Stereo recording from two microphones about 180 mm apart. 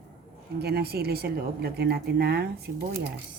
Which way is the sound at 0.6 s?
60° right (ahead or behind).